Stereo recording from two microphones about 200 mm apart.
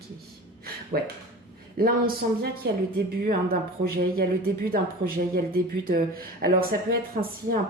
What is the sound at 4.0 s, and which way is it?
Speech, 50° right (ahead or behind).